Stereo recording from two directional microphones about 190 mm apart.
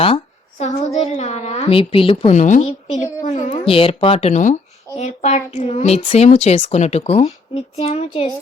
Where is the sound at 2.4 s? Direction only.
40° left (ahead or behind).